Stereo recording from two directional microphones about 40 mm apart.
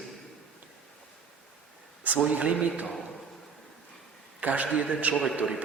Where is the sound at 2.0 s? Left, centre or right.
Right.